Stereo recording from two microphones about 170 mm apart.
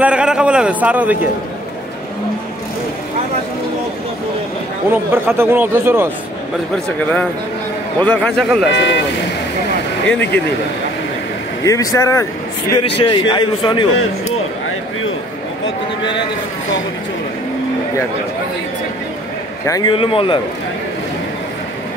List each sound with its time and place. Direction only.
0.0 s a man's voice: 5° right (ahead or behind)
4.9 s a man's voice: 15° right (ahead or behind)
7.0 s a man's voice: 10° left (ahead or behind)
8.7 s speech: 90° left
11.6 s a man's voice: 20° left (ahead or behind)
12.7 s a man's voice: 30° left (ahead or behind)
19.6 s a man's voice: 20° left (ahead or behind)